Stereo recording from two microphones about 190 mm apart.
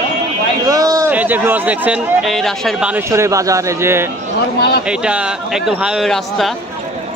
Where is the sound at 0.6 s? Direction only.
20° right (ahead or behind); by 6.5 s centre (ahead or behind).